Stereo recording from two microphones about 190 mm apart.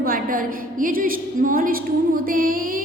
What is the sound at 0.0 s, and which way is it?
A woman's voice, 50° right (ahead or behind).